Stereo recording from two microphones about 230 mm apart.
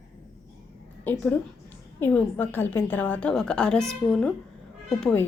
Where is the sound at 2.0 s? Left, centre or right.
Centre.